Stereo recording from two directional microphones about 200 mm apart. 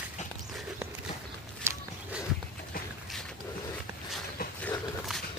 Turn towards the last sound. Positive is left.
turn(degrees=45)  # may be behind; listen again after turning